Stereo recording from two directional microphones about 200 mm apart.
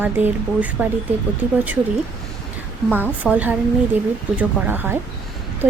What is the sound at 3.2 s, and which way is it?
A woman's voice, 10° right (ahead or behind).